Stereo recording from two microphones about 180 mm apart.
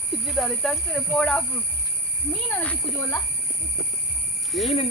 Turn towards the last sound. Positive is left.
turn(degrees=0)  # may be behind; listen again after turning